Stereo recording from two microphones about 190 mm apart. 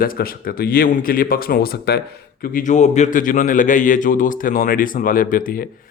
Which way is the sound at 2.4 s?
45° left (ahead or behind).